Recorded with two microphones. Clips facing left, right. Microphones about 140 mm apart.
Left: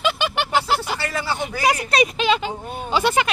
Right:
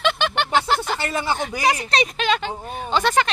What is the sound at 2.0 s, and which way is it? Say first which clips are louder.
Speech: left 3 dB; 5° left (ahead or behind).